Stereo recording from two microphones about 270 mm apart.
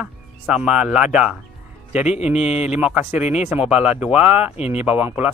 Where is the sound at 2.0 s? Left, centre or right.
Left.